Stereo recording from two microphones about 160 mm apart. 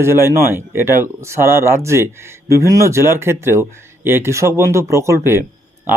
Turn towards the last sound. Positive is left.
turn(degrees=-15)  # may be behind; listen again after turning